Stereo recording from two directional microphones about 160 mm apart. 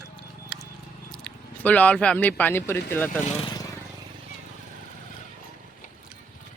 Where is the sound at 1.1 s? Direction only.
5° left (ahead or behind).